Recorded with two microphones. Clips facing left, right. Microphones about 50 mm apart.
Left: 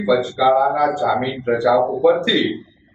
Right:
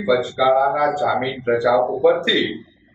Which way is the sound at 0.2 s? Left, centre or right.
Centre.